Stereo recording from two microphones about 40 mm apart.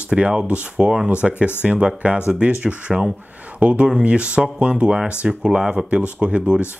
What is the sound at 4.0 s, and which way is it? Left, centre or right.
Speech, right.